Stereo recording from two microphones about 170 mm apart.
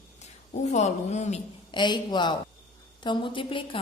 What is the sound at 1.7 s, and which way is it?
A woman's voice, 25° left (ahead or behind).